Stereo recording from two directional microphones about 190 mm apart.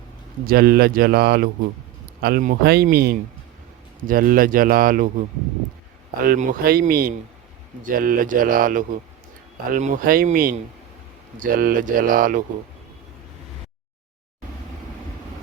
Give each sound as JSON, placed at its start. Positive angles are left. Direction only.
{"t": 0.4, "sound": "speech", "side_deg": -50}
{"t": 6.2, "sound": "speech", "side_deg": -45}